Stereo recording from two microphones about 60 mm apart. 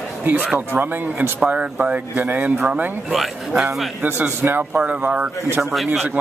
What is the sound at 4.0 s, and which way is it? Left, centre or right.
Speech, right.